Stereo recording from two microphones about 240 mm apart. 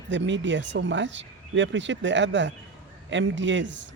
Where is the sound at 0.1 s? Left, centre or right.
Right.